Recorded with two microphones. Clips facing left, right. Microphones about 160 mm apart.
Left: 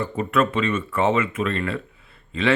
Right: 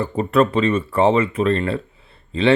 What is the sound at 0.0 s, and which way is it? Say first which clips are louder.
Speech: right 4 dB; 35° right (ahead or behind).